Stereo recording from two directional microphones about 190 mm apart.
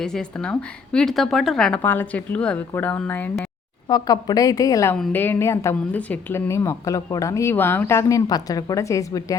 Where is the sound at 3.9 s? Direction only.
20° left (ahead or behind).